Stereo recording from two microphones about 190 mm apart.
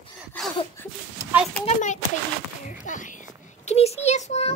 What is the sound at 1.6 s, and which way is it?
A child's voice, 40° left (ahead or behind).